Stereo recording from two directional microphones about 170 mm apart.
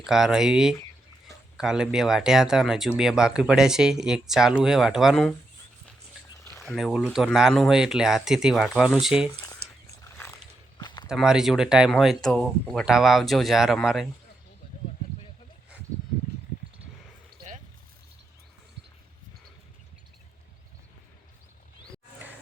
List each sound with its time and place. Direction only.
0.0 s speech: 5° right (ahead or behind)
6.5 s a sound: centre (ahead or behind)
7.1 s speech: centre (ahead or behind)
10.0 s a sound: 15° left (ahead or behind)
10.8 s walk: 25° left (ahead or behind)
11.1 s speech: 5° right (ahead or behind)